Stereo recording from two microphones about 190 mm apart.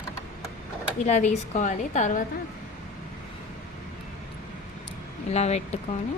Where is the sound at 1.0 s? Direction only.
40° left (ahead or behind).